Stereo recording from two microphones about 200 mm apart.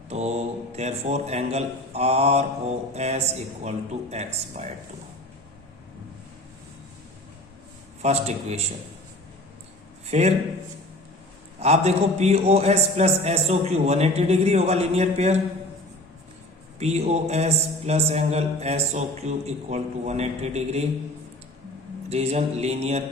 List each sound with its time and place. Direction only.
0.1 s a man's voice: 35° right (ahead or behind)
8.0 s a man's voice: 35° right (ahead or behind)
10.1 s a man's voice: 30° right (ahead or behind)
11.6 s a man's voice: 35° right (ahead or behind)
16.8 s a man's voice: 30° right (ahead or behind)
22.1 s a man's voice: 30° right (ahead or behind)